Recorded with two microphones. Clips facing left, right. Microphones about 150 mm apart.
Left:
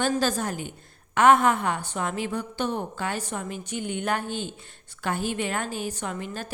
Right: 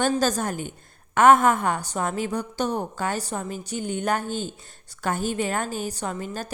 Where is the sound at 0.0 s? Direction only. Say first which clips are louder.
Right 2 dB; 45° right (ahead or behind).